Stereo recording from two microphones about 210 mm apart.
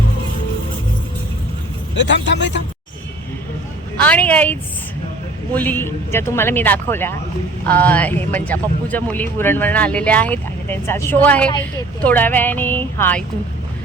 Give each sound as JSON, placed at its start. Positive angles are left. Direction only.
{"t": 2.0, "sound": "speech", "side_deg": 60}
{"t": 4.0, "sound": "speech", "side_deg": 5}
{"t": 5.5, "sound": "speech", "side_deg": 10}